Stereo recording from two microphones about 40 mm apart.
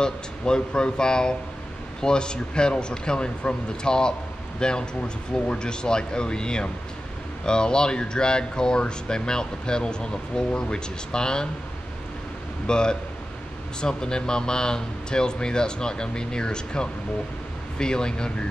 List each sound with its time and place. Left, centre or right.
0.0 s speech: left
12.6 s speech: centre